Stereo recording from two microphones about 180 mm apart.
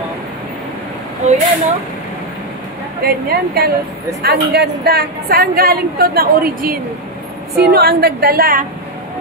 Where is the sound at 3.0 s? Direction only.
60° right (ahead or behind).